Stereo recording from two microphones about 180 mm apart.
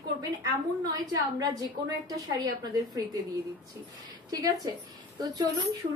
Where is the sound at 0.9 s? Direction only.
20° right (ahead or behind).